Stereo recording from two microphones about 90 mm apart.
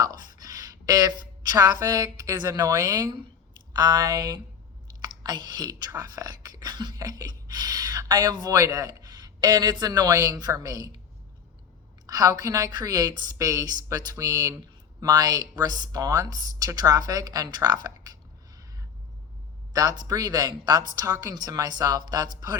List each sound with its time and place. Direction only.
0.0 s a woman's voice: 45° right (ahead or behind)
5.0 s whispering: 55° right (ahead or behind)
8.5 s speech: 40° right (ahead or behind)
12.0 s speech: 45° right (ahead or behind)
19.7 s speech: 45° right (ahead or behind)